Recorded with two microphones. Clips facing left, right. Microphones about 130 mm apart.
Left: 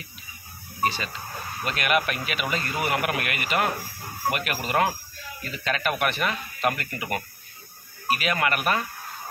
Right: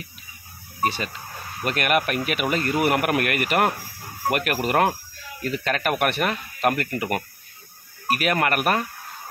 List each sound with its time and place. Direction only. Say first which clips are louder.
0.8 s speech: right 2 dB; 55° right (ahead or behind)